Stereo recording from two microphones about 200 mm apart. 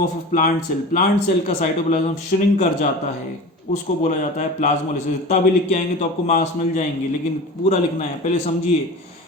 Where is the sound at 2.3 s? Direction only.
45° left (ahead or behind).